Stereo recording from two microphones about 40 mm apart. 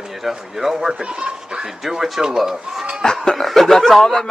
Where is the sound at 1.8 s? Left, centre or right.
Centre.